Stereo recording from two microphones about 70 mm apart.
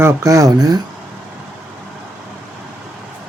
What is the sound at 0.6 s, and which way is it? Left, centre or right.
Speech, right.